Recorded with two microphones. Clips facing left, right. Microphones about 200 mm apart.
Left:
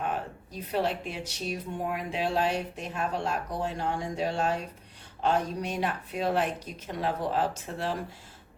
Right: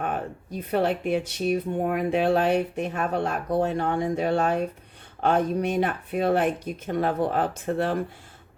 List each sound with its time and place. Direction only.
0.0 s speech: 55° right (ahead or behind)